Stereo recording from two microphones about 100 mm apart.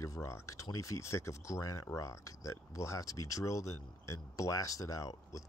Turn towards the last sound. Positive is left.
turn(degrees=35)  # may be behind; listen again after turning